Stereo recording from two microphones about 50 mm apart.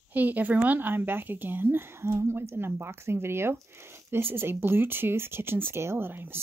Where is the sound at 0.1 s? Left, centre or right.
Right.